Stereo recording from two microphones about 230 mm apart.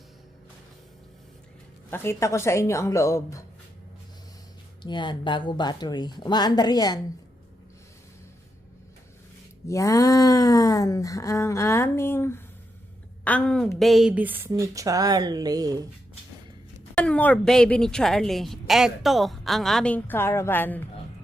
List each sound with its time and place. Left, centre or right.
1.9 s speech: centre
4.8 s speech: centre
9.6 s a woman's voice: centre
16.9 s a woman's voice: centre